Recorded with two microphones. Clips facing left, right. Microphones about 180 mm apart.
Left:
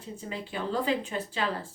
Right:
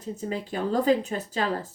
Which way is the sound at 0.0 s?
40° right (ahead or behind).